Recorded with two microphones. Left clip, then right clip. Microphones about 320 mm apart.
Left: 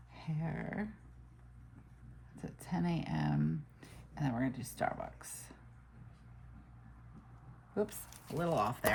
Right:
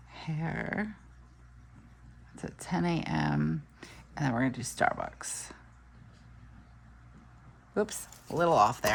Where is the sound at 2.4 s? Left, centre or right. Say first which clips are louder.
Right 7 dB; centre.